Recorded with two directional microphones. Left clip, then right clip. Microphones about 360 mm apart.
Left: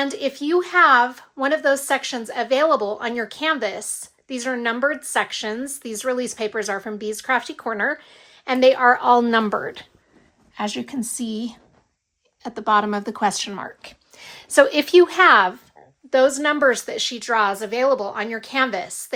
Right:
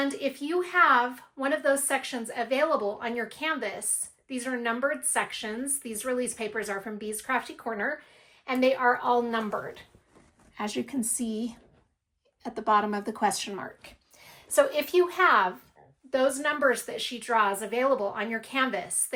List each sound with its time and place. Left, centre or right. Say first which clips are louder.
0.0 s a woman's voice: left 6 dB; centre